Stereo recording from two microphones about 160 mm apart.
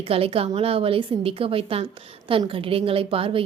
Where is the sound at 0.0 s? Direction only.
35° right (ahead or behind).